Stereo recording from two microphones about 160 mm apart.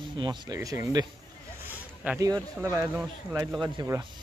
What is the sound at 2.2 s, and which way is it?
A man's voice, 20° right (ahead or behind).